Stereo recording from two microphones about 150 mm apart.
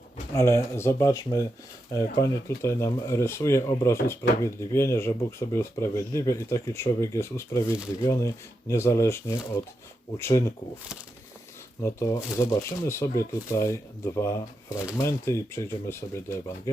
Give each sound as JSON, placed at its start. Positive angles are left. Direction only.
{"t": 0.3, "sound": "speech", "side_deg": 20}
{"t": 11.8, "sound": "speech", "side_deg": 20}